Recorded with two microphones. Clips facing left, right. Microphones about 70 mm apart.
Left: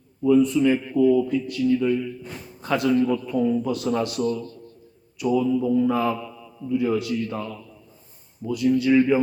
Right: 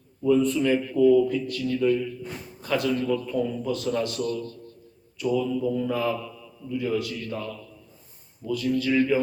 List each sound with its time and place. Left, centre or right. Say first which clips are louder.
0.2 s a man's voice: left 3 dB; centre